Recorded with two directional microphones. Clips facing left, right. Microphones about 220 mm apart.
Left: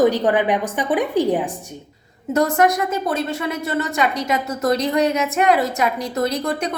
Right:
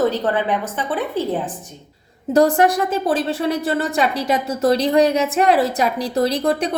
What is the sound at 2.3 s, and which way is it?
A woman's voice, 30° right (ahead or behind).